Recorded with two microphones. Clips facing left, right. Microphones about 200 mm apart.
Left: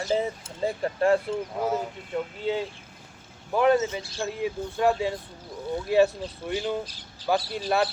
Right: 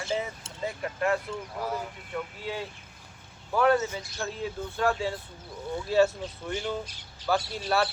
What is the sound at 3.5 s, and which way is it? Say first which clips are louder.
Speech: left 2 dB; 20° left (ahead or behind).